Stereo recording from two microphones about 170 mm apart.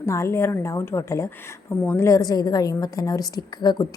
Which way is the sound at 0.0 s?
15° left (ahead or behind).